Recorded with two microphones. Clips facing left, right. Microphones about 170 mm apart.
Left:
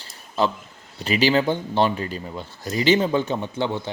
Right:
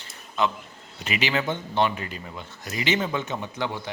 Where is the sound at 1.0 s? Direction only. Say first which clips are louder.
Left 7 dB; 35° left (ahead or behind).